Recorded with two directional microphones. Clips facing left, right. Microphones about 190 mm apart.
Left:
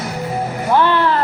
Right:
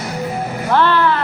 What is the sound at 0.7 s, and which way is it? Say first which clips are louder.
Music: even; 15° left (ahead or behind).